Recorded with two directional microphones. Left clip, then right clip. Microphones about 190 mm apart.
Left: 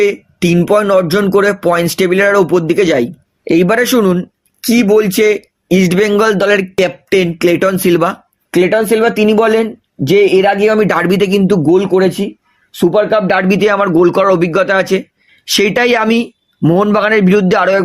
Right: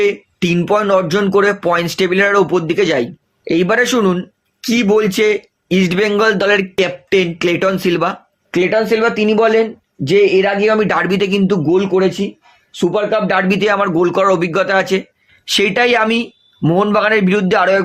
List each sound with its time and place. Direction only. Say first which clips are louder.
0.0 s speech: left 3 dB; 45° left (ahead or behind)